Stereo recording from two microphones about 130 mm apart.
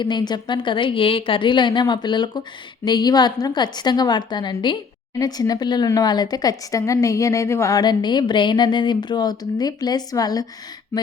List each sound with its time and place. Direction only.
0.0 s a woman's voice: 35° left (ahead or behind)